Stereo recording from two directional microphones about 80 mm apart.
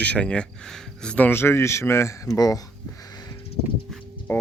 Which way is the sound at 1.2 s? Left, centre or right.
Left.